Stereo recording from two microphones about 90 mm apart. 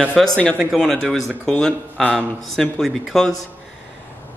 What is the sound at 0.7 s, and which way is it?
A man's voice, 5° left (ahead or behind).